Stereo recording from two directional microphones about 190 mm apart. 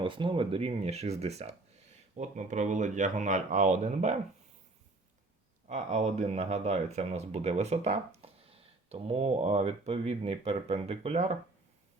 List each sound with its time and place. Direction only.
0.0 s speech: 25° right (ahead or behind)
5.6 s speech: 35° right (ahead or behind)